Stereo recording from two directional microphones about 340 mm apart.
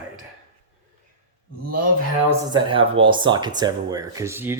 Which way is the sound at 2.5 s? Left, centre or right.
Centre.